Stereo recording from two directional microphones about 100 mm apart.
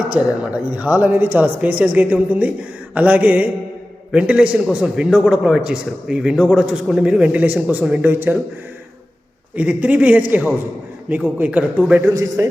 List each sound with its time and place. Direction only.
0.1 s a man's voice: 10° right (ahead or behind)
9.6 s a man's voice: 15° right (ahead or behind)
12.0 s a man's voice: 30° right (ahead or behind)